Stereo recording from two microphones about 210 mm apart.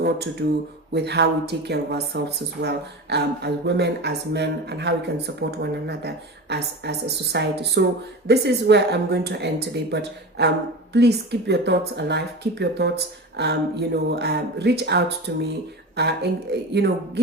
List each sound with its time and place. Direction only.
0.4 s speech: 55° right (ahead or behind)